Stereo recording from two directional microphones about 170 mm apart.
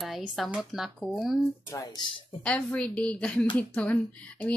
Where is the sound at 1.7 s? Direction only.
20° left (ahead or behind).